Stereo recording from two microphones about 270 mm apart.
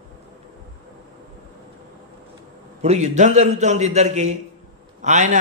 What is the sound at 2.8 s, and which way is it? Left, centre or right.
A man's voice, right.